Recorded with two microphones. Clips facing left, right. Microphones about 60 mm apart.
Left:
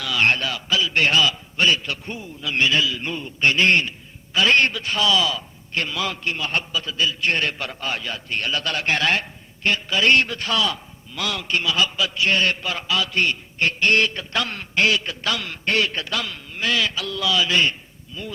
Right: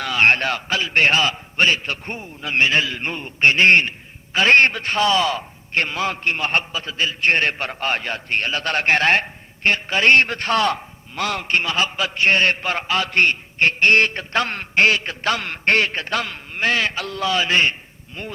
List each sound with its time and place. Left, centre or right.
0.0 s a man's voice: right
18.2 s speech: right